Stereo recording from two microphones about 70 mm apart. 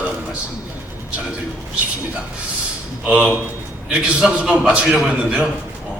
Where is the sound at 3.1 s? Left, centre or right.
Centre.